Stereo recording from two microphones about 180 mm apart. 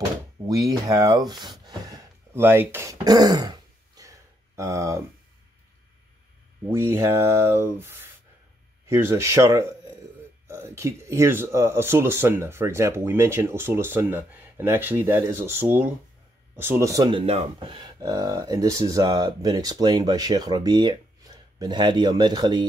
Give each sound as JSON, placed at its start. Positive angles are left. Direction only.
{"t": 0.5, "sound": "a sound", "side_deg": -20}
{"t": 6.7, "sound": "speech", "side_deg": -15}
{"t": 17.3, "sound": "speech", "side_deg": -30}